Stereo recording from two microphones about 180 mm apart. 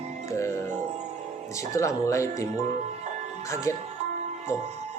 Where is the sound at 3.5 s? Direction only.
15° left (ahead or behind).